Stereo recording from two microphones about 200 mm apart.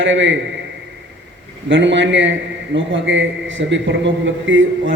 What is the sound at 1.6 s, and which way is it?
A man's voice, 65° right (ahead or behind).